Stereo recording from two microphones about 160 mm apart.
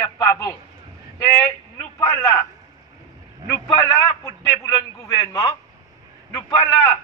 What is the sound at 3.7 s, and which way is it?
A man's voice, 20° left (ahead or behind).